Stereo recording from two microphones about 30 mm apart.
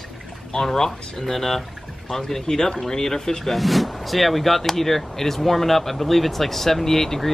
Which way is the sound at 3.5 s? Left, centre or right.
Centre.